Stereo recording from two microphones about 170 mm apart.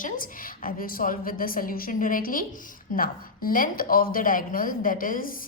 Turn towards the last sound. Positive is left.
turn(degrees=55)  # may be behind; listen again after turning